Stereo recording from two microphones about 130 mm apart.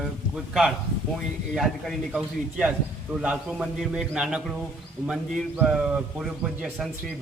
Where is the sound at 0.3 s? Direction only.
5° right (ahead or behind).